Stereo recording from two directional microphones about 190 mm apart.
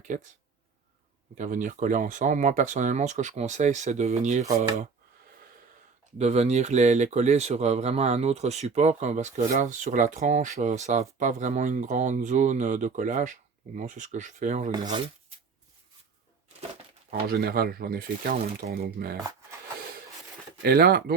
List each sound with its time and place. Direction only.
0.1 s speech: 40° right (ahead or behind)
1.4 s speech: 40° right (ahead or behind)
6.1 s speech: 35° right (ahead or behind)
14.7 s speech: 20° right (ahead or behind)
17.1 s speech: 55° right (ahead or behind)
20.6 s speech: 55° right (ahead or behind)